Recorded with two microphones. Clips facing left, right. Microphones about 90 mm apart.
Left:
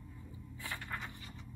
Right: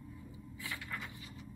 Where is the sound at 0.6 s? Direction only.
20° left (ahead or behind).